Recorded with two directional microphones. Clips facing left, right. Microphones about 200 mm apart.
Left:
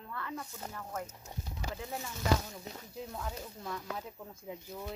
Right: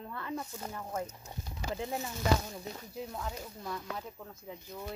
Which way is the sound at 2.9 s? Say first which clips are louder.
Right 1 dB; 5° right (ahead or behind).